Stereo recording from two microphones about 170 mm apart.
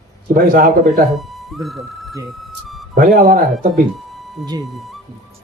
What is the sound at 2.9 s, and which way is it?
Speech, 60° right (ahead or behind).